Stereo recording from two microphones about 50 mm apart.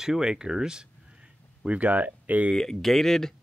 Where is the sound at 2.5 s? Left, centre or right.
Centre.